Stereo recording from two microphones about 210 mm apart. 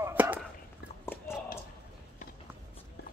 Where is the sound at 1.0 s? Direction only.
10° left (ahead or behind).